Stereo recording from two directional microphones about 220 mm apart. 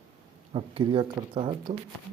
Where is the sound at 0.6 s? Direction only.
20° right (ahead or behind).